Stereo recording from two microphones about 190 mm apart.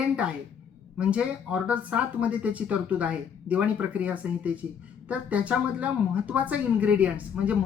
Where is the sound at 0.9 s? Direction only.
5° right (ahead or behind).